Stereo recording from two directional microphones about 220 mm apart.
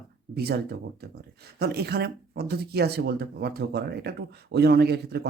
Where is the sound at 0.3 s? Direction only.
45° right (ahead or behind).